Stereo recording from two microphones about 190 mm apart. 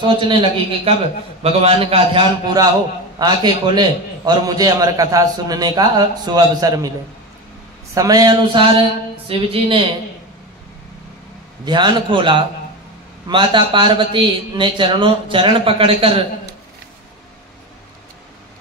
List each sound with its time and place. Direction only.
0.2 s a man's voice: 25° right (ahead or behind)
7.9 s a man's voice: 20° right (ahead or behind)
11.6 s a man's voice: 25° right (ahead or behind)